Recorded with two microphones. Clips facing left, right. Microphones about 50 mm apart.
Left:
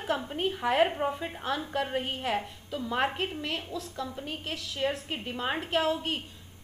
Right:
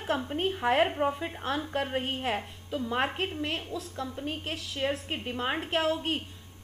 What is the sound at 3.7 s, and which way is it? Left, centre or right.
Speech, centre.